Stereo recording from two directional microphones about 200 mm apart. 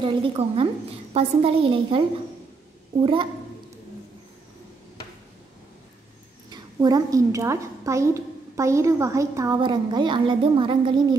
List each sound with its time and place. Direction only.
0.0 s a woman's voice: 25° right (ahead or behind)
6.5 s a woman's voice: 20° right (ahead or behind)